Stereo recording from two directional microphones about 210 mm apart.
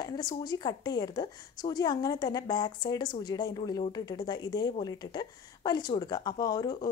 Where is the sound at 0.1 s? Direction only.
20° left (ahead or behind).